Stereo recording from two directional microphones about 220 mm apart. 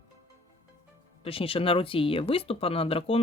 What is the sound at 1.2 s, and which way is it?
Speech, 25° left (ahead or behind).